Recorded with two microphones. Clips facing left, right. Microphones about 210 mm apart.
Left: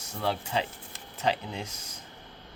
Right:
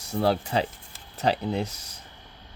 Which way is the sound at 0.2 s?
35° right (ahead or behind).